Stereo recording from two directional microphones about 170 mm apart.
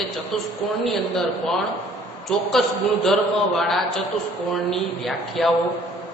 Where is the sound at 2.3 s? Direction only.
5° left (ahead or behind).